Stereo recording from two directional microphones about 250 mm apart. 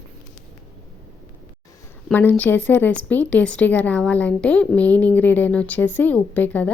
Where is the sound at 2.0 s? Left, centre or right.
Centre.